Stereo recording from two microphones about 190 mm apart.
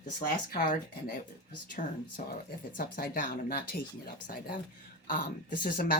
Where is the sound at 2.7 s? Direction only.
50° left (ahead or behind).